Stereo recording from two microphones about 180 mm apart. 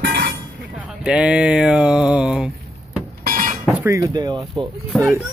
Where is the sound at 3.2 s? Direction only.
50° right (ahead or behind).